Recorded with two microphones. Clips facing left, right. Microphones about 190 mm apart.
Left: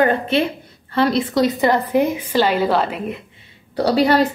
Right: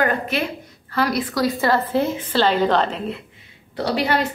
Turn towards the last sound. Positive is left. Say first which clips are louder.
# left 6 dB
turn(degrees=35)  # may be behind; listen again after turning